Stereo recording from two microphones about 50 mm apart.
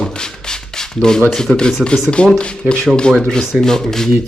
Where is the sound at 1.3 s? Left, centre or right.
Centre.